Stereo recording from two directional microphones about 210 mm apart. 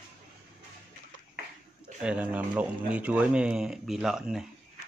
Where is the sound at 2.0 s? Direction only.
5° right (ahead or behind).